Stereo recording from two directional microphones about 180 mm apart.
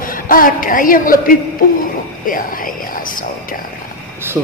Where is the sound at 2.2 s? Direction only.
50° left (ahead or behind).